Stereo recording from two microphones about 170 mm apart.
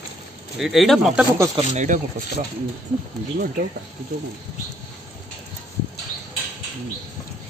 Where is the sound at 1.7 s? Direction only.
50° right (ahead or behind).